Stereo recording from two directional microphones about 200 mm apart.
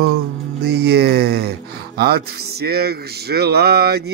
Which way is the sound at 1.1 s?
50° right (ahead or behind).